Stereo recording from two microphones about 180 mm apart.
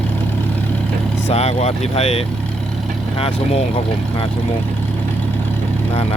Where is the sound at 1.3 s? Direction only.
35° left (ahead or behind).